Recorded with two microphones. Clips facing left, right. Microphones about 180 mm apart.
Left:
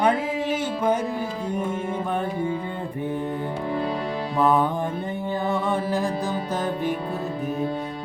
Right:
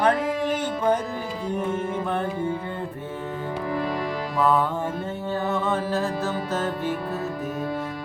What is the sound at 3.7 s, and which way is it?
Music, 25° left (ahead or behind).